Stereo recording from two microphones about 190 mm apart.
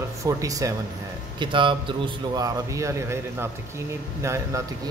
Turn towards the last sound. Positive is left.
turn(degrees=-15)  # may be behind; listen again after turning